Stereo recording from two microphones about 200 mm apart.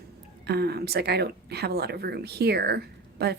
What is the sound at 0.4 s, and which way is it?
Speech, 55° right (ahead or behind).